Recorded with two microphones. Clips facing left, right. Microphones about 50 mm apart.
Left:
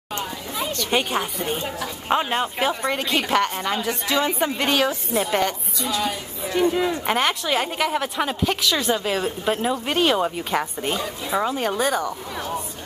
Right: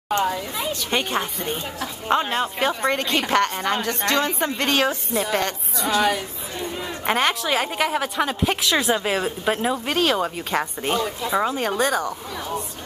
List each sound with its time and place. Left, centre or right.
0.6 s a woman's voice: centre
5.8 s speech: right
6.5 s speech: left
7.1 s a woman's voice: centre
9.8 s a woman's voice: centre